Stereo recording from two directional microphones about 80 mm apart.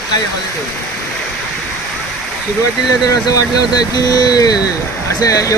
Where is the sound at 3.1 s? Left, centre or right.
Left.